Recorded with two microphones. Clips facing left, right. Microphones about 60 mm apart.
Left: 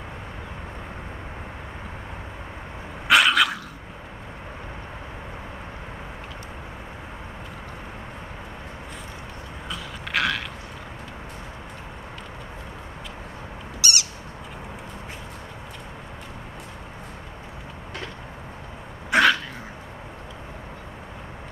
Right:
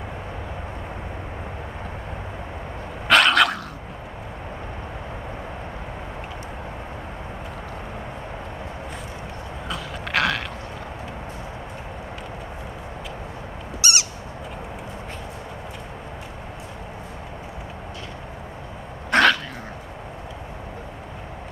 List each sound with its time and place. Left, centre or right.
3.1 s dog: centre
9.7 s a sound: centre
13.8 s owl: right
19.0 s dog: centre